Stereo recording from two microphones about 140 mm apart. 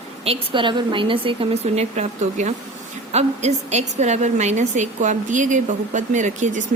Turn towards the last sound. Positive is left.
turn(degrees=-60)  # may be behind; listen again after turning